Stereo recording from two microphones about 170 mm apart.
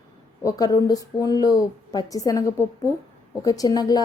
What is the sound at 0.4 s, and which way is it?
A woman's voice, 20° left (ahead or behind).